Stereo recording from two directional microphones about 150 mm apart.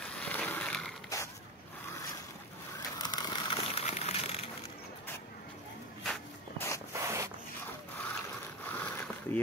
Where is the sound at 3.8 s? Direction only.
45° left (ahead or behind).